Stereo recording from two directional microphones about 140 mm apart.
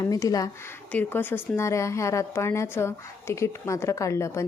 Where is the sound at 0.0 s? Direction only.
25° left (ahead or behind).